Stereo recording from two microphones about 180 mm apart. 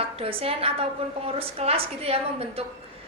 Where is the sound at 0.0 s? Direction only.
30° right (ahead or behind).